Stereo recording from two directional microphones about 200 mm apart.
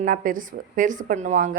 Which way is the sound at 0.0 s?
45° right (ahead or behind).